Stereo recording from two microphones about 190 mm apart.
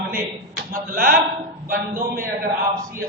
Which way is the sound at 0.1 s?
50° right (ahead or behind).